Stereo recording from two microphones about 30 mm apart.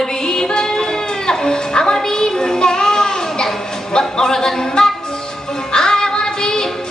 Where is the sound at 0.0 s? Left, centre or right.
Centre.